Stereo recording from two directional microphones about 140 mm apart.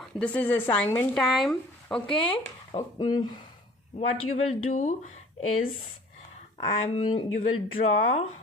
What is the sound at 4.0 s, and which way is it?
Speech, 50° left (ahead or behind).